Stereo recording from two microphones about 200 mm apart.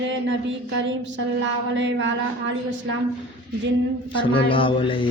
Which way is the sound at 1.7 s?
65° right (ahead or behind).